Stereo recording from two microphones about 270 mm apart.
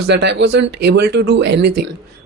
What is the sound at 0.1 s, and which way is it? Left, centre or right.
Speech, right.